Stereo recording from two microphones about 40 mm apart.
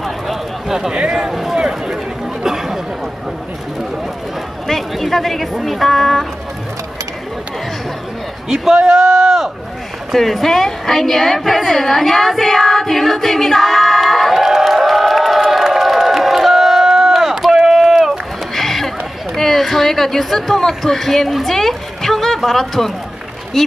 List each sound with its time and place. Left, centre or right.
0.7 s speech: centre
0.9 s a sound: centre
1.3 s a sound: centre
1.6 s a sound: centre
2.4 s chatter: centre
4.6 s speech: centre
8.5 s a man's voice: centre
10.1 s a woman's voice: centre
14.3 s crowd: centre
18.5 s horse: centre
19.3 s a woman's voice: centre